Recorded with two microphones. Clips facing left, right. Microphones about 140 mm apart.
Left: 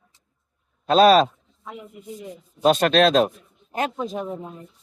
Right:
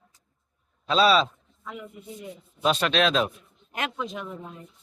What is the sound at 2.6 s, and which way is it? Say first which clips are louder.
A man's voice: left 6 dB; 45° left (ahead or behind).